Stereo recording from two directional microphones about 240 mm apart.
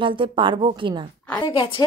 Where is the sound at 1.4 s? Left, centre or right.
Centre.